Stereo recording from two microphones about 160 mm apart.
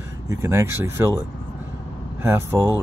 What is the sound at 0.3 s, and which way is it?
Speech, 15° right (ahead or behind).